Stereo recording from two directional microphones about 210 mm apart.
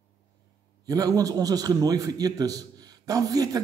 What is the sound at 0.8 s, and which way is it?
A man's voice, 15° right (ahead or behind).